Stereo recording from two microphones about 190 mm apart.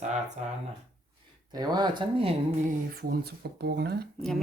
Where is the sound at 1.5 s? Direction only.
20° right (ahead or behind).